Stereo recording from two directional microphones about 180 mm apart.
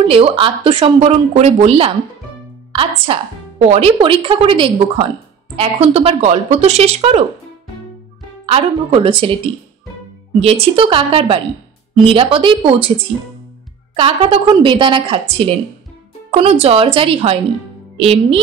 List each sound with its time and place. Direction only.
0.1 s a woman's voice: 30° right (ahead or behind)
8.5 s speech: 30° right (ahead or behind)
10.4 s a woman's voice: 30° right (ahead or behind)
13.9 s a woman's voice: 30° right (ahead or behind)